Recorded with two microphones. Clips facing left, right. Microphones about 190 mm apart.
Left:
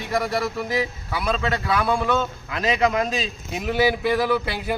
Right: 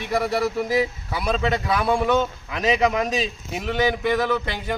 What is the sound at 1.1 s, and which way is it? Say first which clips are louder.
Speech: right 1 dB; 20° right (ahead or behind).